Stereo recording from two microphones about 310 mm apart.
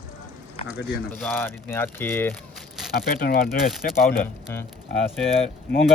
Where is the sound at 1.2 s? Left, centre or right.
Centre.